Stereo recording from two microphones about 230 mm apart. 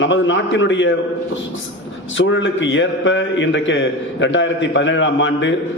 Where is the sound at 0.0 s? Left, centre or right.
Left.